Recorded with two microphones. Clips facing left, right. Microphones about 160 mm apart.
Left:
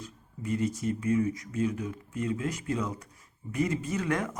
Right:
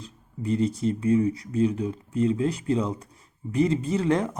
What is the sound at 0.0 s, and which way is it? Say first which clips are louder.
Speech: right 5 dB; 30° right (ahead or behind).